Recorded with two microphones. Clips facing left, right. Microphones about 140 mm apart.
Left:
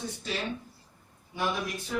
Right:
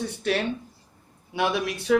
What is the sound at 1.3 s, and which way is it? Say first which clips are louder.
Speech: right 6 dB; 75° right (ahead or behind).